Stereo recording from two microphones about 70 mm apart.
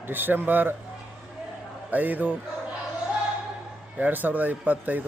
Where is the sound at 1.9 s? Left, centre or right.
Right.